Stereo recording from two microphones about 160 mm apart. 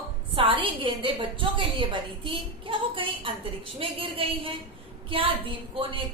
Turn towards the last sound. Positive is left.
turn(degrees=-35)  # may be behind; listen again after turning